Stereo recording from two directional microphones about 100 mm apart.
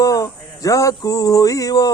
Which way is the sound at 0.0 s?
35° left (ahead or behind).